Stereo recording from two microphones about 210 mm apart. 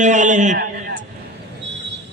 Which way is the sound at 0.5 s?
55° right (ahead or behind).